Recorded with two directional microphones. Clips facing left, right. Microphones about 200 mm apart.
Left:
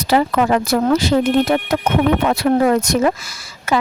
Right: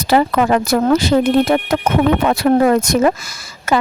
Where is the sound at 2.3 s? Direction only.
55° right (ahead or behind).